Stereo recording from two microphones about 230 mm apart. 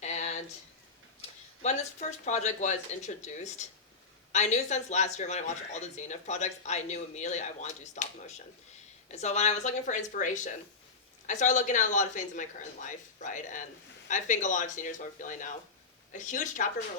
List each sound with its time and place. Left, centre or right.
0.0 s a sound: left
1.6 s speech: left
9.0 s speech: left